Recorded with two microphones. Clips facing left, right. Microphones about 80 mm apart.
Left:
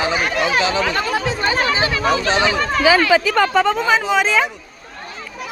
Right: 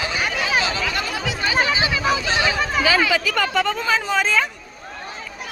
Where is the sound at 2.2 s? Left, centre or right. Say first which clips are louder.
Left 4 dB; left.